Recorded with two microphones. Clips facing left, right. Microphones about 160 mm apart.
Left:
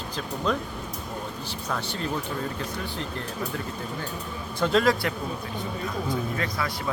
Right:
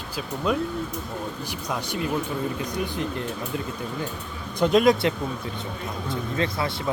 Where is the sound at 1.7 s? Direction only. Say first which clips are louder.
Right 3 dB; 15° right (ahead or behind).